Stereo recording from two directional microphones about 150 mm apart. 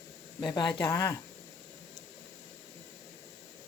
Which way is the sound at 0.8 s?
20° left (ahead or behind).